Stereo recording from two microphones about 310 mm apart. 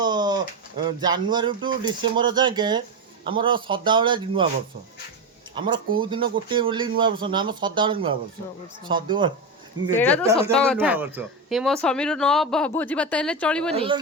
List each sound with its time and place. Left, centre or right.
0.0 s pigeon: centre
0.9 s speech: centre
5.5 s speech: centre
9.9 s speech: centre
13.7 s speech: centre